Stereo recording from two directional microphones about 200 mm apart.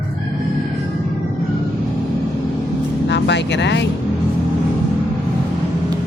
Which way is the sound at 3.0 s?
60° left (ahead or behind).